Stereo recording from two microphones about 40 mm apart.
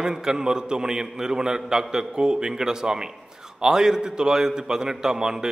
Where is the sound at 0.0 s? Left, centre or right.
Centre.